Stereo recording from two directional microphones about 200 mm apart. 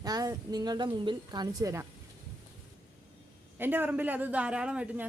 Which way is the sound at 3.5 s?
10° right (ahead or behind).